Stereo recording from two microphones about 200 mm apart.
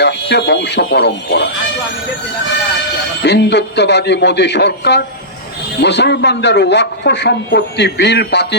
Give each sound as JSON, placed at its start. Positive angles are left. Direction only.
{"t": 0.0, "sound": "speech", "side_deg": 60}
{"t": 3.2, "sound": "a man's voice", "side_deg": 55}